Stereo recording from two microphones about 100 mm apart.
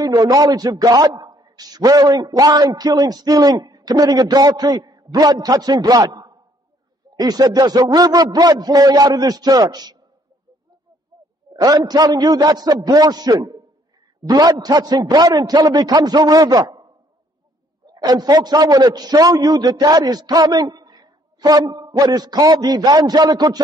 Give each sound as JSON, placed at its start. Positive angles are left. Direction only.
{"t": 0.0, "sound": "a man's voice", "side_deg": -40}
{"t": 11.6, "sound": "a man's voice", "side_deg": -40}
{"t": 17.8, "sound": "a sound", "side_deg": -45}
{"t": 18.2, "sound": "a man's voice", "side_deg": -40}